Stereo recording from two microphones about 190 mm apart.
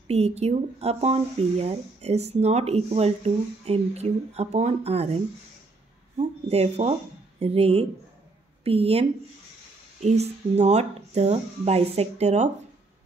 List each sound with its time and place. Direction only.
0.1 s speech: 35° right (ahead or behind)